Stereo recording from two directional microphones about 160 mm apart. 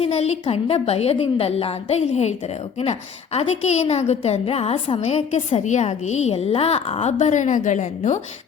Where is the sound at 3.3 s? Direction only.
40° left (ahead or behind).